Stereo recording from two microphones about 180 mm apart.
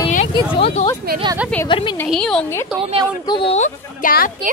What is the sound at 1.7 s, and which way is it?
Speech, 25° left (ahead or behind).